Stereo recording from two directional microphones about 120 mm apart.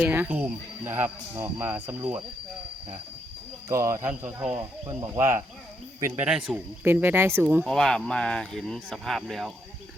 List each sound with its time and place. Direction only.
0.0 s speech: 15° right (ahead or behind)
3.7 s speech: 25° right (ahead or behind)
6.2 s speech: 10° right (ahead or behind)
7.4 s speech: 10° right (ahead or behind)
7.7 s speech: 5° left (ahead or behind)